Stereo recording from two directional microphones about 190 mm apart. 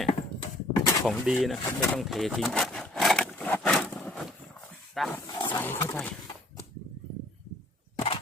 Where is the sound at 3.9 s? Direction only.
5° left (ahead or behind).